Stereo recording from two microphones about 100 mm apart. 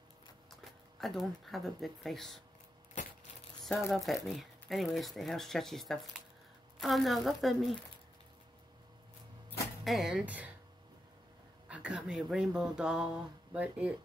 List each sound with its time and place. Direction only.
1.0 s speech: centre (ahead or behind)
3.9 s speech: centre (ahead or behind)
9.8 s speech: 5° right (ahead or behind)
11.7 s speech: 10° right (ahead or behind)